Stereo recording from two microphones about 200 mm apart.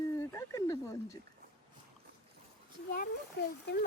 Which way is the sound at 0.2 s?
15° left (ahead or behind).